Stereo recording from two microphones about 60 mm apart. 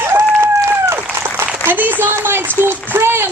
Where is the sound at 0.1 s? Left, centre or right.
Right.